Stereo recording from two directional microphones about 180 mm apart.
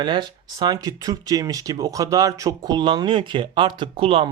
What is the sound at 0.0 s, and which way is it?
Speech, 25° right (ahead or behind).